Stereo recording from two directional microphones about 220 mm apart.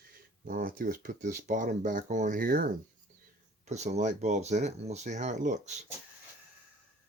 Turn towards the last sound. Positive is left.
turn(degrees=-35)  # may be behind; listen again after turning